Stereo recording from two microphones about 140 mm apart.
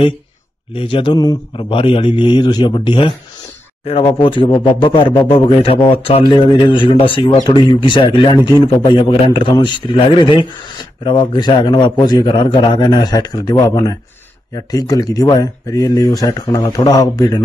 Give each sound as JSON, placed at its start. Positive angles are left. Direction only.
{"t": 0.7, "sound": "speech", "side_deg": 35}
{"t": 7.3, "sound": "speech", "side_deg": 30}